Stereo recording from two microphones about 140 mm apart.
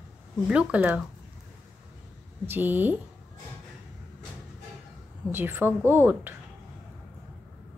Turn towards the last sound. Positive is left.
turn(degrees=-15)  # may be behind; listen again after turning